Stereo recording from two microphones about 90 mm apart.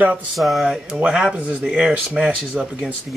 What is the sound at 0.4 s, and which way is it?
Speech, centre (ahead or behind).